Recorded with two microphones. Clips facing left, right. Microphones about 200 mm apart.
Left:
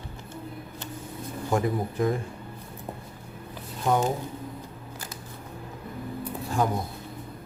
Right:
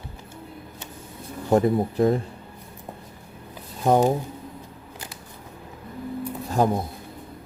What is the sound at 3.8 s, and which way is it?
Speech, 40° right (ahead or behind).